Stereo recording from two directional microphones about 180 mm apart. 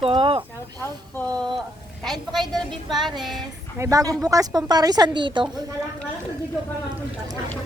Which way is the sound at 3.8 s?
20° right (ahead or behind).